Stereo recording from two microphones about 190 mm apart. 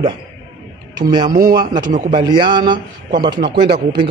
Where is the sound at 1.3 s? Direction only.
45° right (ahead or behind).